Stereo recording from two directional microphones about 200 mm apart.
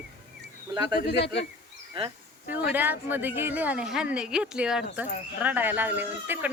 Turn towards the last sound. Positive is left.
turn(degrees=-10)  # may be behind; listen again after turning